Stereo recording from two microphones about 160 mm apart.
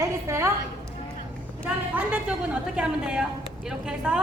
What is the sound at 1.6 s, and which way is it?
A woman's voice, 10° right (ahead or behind).